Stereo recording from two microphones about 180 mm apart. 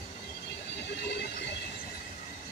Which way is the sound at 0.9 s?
65° left (ahead or behind).